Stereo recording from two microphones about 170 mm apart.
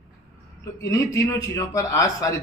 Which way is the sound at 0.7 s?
15° left (ahead or behind).